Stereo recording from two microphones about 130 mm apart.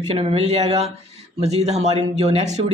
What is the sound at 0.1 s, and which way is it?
Speech, 50° right (ahead or behind).